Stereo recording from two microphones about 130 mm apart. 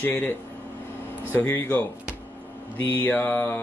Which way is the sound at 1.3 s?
15° left (ahead or behind).